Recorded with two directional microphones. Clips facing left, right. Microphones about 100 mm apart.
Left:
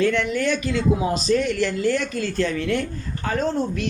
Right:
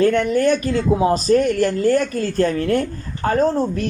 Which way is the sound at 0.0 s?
40° right (ahead or behind).